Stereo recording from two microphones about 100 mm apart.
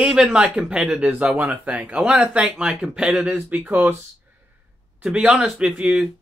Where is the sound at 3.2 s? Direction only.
15° right (ahead or behind).